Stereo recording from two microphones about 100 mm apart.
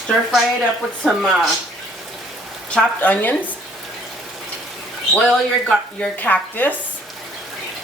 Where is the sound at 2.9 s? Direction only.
15° left (ahead or behind).